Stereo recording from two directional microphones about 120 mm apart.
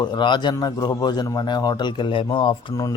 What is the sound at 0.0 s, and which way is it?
A man's voice, 40° left (ahead or behind).